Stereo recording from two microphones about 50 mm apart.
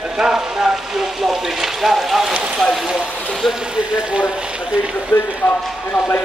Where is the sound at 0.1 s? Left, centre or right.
Centre.